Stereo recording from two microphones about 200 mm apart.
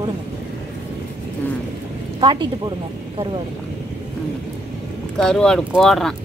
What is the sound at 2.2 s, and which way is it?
Speech, 20° right (ahead or behind).